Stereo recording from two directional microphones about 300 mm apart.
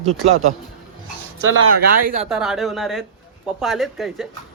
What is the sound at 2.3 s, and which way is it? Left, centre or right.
Speech, centre.